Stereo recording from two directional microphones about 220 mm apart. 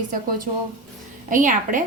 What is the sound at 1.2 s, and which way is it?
Speech, 35° right (ahead or behind).